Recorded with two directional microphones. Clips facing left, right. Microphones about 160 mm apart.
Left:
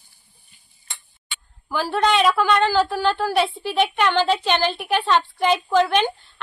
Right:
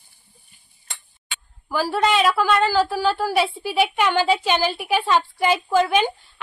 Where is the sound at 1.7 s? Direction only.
5° right (ahead or behind).